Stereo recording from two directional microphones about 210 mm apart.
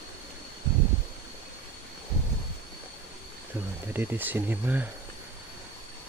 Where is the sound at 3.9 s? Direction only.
10° right (ahead or behind).